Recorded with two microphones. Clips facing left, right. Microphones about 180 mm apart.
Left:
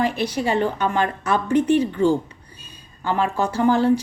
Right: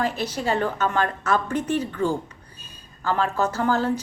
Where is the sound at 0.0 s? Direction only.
15° left (ahead or behind).